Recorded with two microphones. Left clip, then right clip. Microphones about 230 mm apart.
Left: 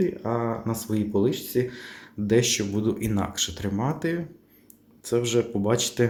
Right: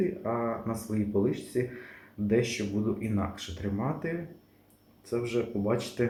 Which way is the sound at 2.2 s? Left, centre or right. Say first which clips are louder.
Left 6 dB; left.